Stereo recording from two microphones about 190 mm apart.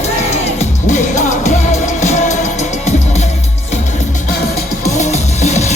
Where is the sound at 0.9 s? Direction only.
40° left (ahead or behind).